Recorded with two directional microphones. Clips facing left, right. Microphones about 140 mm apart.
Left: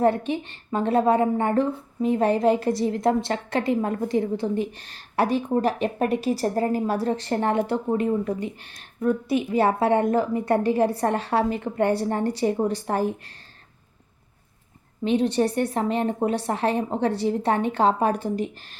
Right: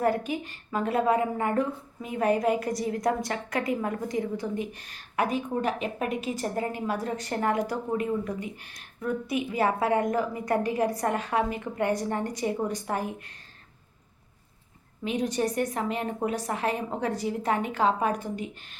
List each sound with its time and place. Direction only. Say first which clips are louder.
0.0 s a woman's voice: left 5 dB; 25° left (ahead or behind)
15.0 s a woman's voice: left 6 dB; 30° left (ahead or behind)